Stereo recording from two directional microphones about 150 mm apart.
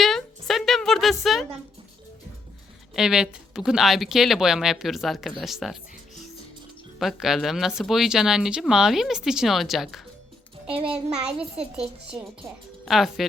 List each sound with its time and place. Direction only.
0.0 s a sound: centre (ahead or behind)
1.2 s speech: centre (ahead or behind)
2.9 s speech: 5° right (ahead or behind)
7.0 s speech: centre (ahead or behind)
10.8 s a child's voice: 40° right (ahead or behind)
11.8 s speech: 5° right (ahead or behind)